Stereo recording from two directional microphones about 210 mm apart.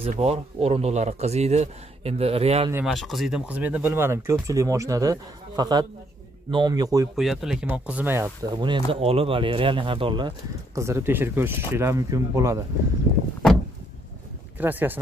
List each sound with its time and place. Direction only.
0.0 s speech: 30° right (ahead or behind)
2.7 s speech: centre (ahead or behind); by 7.1 s 15° right (ahead or behind)
7.2 s speech: centre (ahead or behind)
14.6 s speech: 10° right (ahead or behind)